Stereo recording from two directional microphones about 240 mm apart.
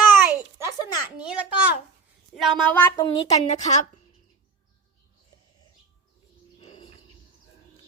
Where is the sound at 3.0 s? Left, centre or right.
Left.